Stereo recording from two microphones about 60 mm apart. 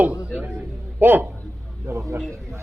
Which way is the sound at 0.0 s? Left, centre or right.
Right.